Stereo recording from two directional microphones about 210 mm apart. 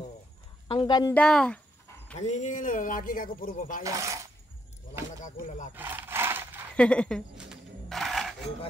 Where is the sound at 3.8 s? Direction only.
15° right (ahead or behind).